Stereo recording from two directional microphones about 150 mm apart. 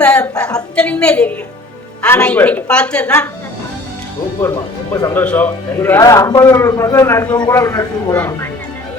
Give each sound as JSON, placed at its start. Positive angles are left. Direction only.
{"t": 0.0, "sound": "a woman's voice", "side_deg": 10}
{"t": 4.4, "sound": "a man's voice", "side_deg": 20}